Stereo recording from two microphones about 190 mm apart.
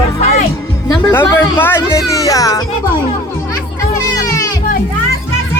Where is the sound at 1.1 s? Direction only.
15° left (ahead or behind).